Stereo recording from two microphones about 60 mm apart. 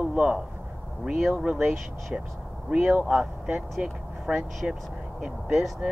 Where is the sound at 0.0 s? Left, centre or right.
Centre.